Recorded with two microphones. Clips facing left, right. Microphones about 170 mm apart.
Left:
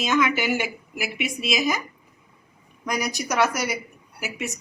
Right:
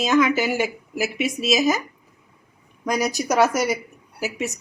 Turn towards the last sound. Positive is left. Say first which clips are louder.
# right 5 dB
turn(degrees=-40)  # may be behind; listen again after turning